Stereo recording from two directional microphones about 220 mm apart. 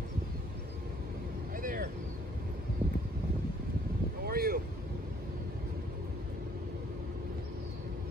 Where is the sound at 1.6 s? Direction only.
40° right (ahead or behind).